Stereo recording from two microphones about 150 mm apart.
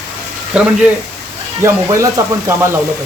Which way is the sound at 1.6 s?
20° right (ahead or behind).